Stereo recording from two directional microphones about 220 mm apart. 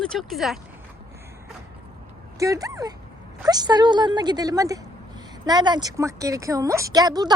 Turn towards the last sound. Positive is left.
turn(degrees=-15)  # may be behind; listen again after turning